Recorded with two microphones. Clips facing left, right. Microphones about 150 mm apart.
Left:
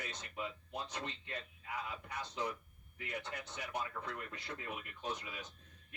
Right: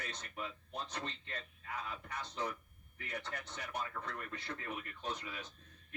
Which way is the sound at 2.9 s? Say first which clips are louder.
Even; 15° left (ahead or behind).